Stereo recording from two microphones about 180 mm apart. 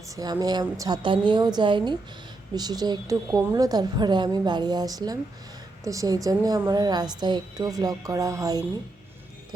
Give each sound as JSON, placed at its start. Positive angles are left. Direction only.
{"t": 0.2, "sound": "a woman's voice", "side_deg": -20}